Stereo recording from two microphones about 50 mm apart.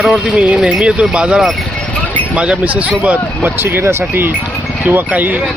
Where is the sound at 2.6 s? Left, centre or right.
Right.